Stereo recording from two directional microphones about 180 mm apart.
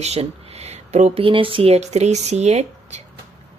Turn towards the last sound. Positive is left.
turn(degrees=-40)  # may be behind; listen again after turning